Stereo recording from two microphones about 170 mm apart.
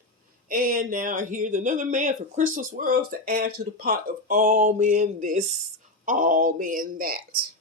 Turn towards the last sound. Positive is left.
turn(degrees=-55)  # may be behind; listen again after turning